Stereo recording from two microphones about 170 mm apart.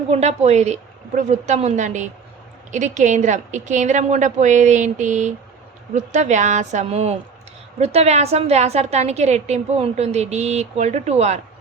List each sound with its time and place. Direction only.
0.1 s a woman's voice: 40° right (ahead or behind)